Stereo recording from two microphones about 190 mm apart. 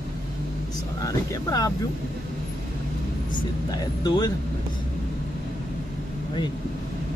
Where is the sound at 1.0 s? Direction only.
20° left (ahead or behind).